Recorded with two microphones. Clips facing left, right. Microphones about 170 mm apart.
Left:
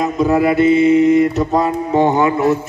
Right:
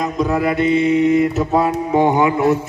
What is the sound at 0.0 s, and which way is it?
Mantra, 5° left (ahead or behind).